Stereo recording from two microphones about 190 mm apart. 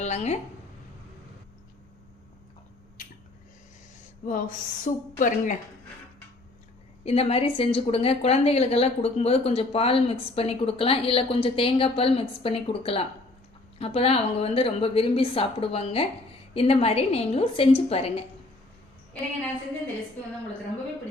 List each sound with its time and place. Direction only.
0.0 s speech: 35° left (ahead or behind)
3.0 s a sound: 45° left (ahead or behind)
4.3 s a woman's voice: 45° left (ahead or behind)
7.0 s a woman's voice: 30° left (ahead or behind)